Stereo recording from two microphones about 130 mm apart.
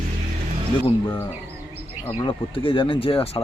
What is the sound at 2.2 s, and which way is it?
Speech, 40° left (ahead or behind).